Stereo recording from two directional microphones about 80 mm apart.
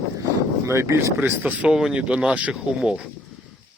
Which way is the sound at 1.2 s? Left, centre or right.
Centre.